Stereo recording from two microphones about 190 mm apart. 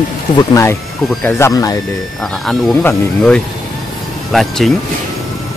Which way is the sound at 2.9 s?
5° left (ahead or behind).